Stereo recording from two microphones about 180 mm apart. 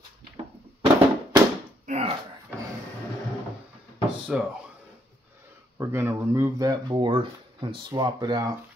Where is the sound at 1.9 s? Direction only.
35° right (ahead or behind).